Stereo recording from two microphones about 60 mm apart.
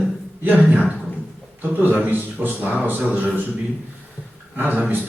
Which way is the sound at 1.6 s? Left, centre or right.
Right.